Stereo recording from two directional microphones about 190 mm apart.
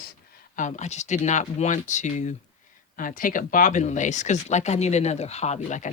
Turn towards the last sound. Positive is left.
turn(degrees=40)  # may be behind; listen again after turning